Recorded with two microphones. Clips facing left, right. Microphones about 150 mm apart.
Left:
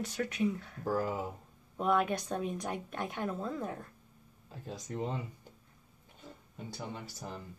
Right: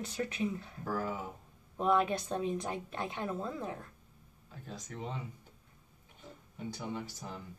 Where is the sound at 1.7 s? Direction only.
5° left (ahead or behind).